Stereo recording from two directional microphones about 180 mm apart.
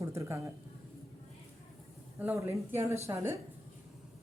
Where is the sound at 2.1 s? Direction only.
15° right (ahead or behind).